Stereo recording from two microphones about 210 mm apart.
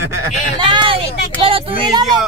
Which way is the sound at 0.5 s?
20° right (ahead or behind).